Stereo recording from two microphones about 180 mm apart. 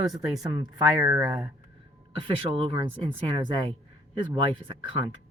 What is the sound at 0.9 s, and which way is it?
Speech, 10° right (ahead or behind).